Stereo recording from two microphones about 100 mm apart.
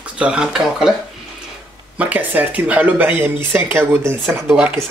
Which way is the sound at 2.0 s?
15° right (ahead or behind).